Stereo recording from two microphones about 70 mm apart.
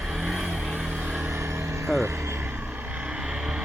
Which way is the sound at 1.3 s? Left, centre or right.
Right.